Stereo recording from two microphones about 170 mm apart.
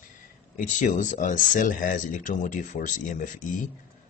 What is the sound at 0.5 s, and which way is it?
Speech, 50° left (ahead or behind).